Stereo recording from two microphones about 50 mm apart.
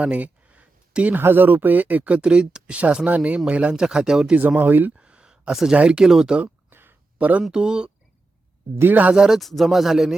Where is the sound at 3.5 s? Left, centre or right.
Right.